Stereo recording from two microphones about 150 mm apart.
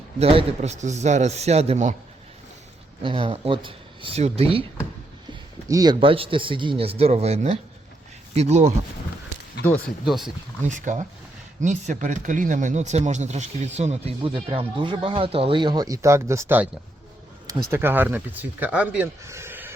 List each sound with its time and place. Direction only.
0.2 s speech: 40° right (ahead or behind)
3.0 s speech: 35° right (ahead or behind)
5.6 s speech: 25° right (ahead or behind); by 8.7 s 50° right (ahead or behind)
10.1 s speech: centre (ahead or behind)
10.6 s speech: 55° right (ahead or behind)
14.2 s speech: 35° right (ahead or behind); by 16.6 s 15° right (ahead or behind)
17.7 s speech: 15° right (ahead or behind)
19.2 s a sound: 20° right (ahead or behind)